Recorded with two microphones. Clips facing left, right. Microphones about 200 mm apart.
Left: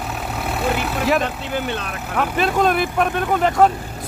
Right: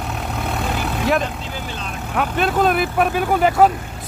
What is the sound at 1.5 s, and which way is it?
Speech, 60° left (ahead or behind).